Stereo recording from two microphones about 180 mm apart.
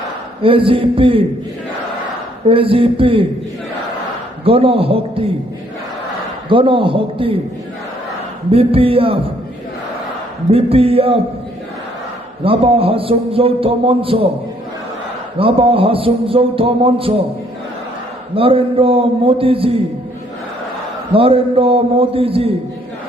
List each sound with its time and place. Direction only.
0.4 s a man's voice: 30° right (ahead or behind)
2.5 s a man's voice: 30° right (ahead or behind)
4.4 s a man's voice: 30° right (ahead or behind)
6.5 s a man's voice: 30° right (ahead or behind)
8.4 s a man's voice: 30° right (ahead or behind)
10.5 s a man's voice: 35° right (ahead or behind)
12.5 s a man's voice: 30° right (ahead or behind)
15.4 s a man's voice: 30° right (ahead or behind)
18.3 s a man's voice: 30° right (ahead or behind)
21.1 s a man's voice: 30° right (ahead or behind)